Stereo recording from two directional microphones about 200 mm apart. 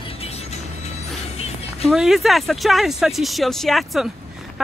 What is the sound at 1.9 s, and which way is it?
A woman's voice, centre (ahead or behind).